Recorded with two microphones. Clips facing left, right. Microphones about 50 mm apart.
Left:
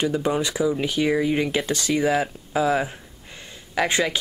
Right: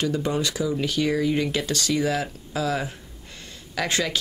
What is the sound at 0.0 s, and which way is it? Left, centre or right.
Speech, centre.